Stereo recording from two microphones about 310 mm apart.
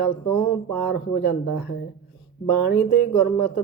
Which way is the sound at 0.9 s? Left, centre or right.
Left.